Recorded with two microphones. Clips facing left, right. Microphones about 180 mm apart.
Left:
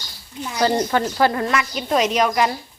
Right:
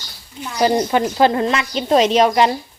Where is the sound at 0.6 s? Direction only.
15° right (ahead or behind).